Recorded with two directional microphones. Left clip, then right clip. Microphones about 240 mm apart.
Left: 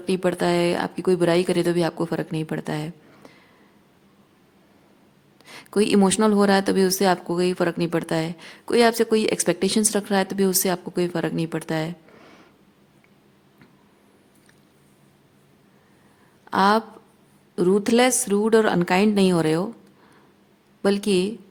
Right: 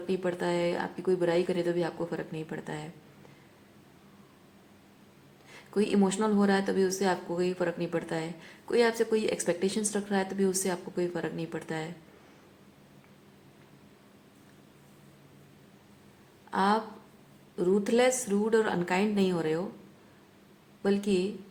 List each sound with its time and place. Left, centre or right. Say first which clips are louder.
0.1 s a woman's voice: left 9 dB; left
5.5 s a woman's voice: left 8 dB; left
16.5 s a woman's voice: left 8 dB; left
20.8 s a woman's voice: left 7 dB; left